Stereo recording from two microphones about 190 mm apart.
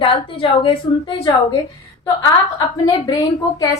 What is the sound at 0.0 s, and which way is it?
A woman's voice, 30° left (ahead or behind).